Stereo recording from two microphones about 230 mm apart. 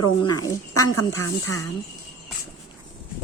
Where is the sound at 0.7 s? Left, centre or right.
Left.